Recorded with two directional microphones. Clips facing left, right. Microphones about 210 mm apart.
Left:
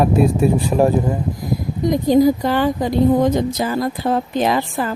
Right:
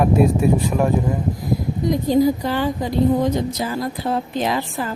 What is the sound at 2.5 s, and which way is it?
A woman's voice, 60° left (ahead or behind).